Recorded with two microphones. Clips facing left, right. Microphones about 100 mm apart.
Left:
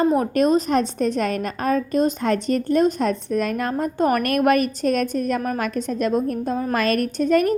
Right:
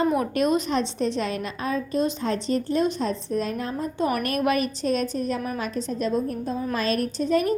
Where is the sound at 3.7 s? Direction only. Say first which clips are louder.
Left 5 dB; 50° left (ahead or behind).